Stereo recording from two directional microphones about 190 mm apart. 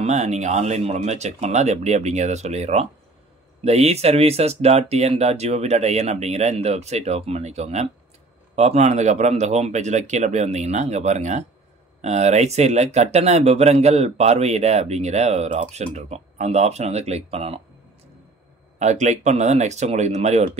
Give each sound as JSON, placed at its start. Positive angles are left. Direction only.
{"t": 0.0, "sound": "speech", "side_deg": -35}
{"t": 18.8, "sound": "speech", "side_deg": -40}